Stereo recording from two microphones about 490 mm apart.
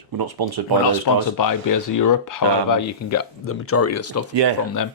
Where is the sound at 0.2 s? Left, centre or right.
Right.